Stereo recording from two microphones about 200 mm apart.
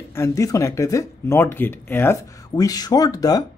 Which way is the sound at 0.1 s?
15° left (ahead or behind).